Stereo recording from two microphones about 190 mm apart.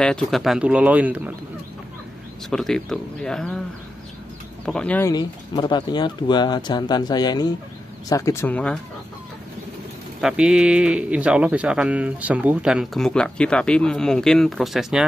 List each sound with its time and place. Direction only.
0.0 s speech: 5° left (ahead or behind)
2.5 s speech: centre (ahead or behind)
4.6 s speech: 5° left (ahead or behind)
5.1 s speech: 20° left (ahead or behind)
10.2 s speech: 5° right (ahead or behind)